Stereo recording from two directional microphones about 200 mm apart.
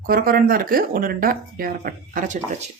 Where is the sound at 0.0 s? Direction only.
45° right (ahead or behind).